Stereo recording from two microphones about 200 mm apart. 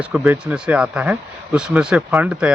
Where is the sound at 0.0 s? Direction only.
5° right (ahead or behind).